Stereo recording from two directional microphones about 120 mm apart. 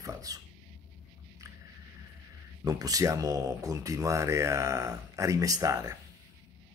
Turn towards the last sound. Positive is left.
turn(degrees=-30)  # may be behind; listen again after turning